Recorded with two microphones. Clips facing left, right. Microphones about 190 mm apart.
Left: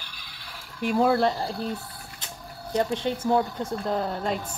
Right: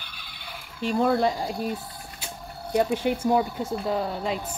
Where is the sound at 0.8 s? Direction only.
5° left (ahead or behind).